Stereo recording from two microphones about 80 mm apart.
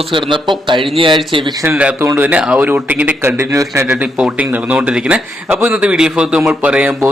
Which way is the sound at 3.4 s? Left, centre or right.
Right.